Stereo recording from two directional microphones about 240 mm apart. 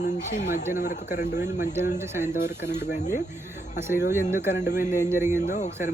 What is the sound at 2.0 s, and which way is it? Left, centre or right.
Speech, centre.